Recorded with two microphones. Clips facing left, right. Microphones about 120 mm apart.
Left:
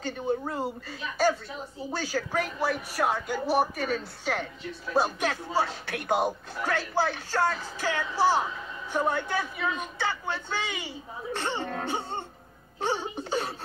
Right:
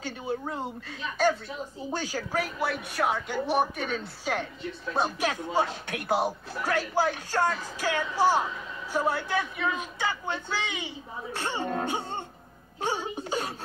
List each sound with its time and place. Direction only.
0.0 s a woman's voice: 5° right (ahead or behind)
2.0 s a woman's voice: 15° right (ahead or behind)
2.3 s a woman's voice: centre (ahead or behind)
4.2 s a woman's voice: 10° right (ahead or behind)
6.0 s a woman's voice: 5° right (ahead or behind)
7.0 s a woman's voice: 15° right (ahead or behind)
9.9 s a woman's voice: 15° right (ahead or behind)
10.6 s a woman's voice: 5° left (ahead or behind)
11.3 s a woman's voice: 10° right (ahead or behind)